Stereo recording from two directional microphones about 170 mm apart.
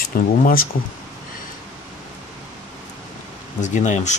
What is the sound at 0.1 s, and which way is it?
Speech, 55° left (ahead or behind).